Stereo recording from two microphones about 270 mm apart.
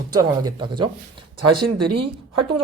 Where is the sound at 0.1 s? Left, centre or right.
Centre.